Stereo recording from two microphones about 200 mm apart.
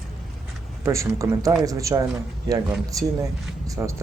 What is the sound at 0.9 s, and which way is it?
Speech, 15° right (ahead or behind).